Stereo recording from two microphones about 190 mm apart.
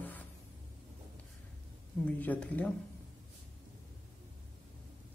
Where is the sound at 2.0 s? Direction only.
10° left (ahead or behind).